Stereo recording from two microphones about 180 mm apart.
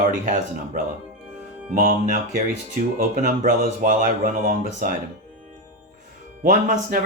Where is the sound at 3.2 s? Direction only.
45° right (ahead or behind).